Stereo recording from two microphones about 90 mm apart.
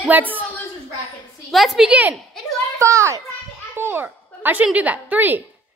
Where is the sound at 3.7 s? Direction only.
25° right (ahead or behind).